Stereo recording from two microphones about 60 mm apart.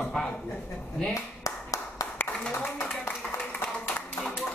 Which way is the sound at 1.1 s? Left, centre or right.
Left.